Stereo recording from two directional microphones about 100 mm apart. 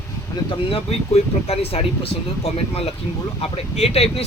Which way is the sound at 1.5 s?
90° left.